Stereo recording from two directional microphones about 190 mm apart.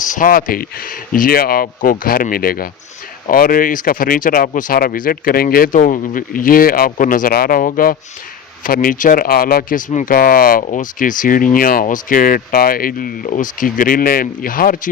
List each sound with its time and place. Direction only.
0.0 s speech: 45° left (ahead or behind)